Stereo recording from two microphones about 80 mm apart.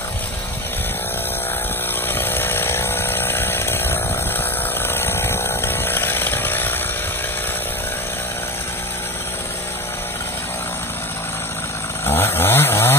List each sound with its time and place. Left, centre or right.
2.1 s chainsaw: left
12.1 s chainsaw: left